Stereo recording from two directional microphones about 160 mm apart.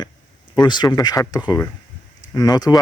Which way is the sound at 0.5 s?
30° left (ahead or behind).